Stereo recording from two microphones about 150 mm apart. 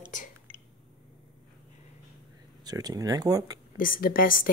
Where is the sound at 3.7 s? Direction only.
70° left (ahead or behind).